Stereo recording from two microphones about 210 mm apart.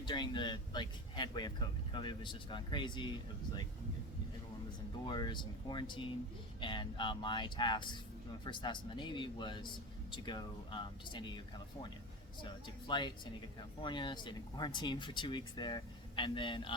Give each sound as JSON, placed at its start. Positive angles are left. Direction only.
{"t": 0.0, "sound": "speech", "side_deg": 20}
{"t": 5.0, "sound": "speech", "side_deg": 20}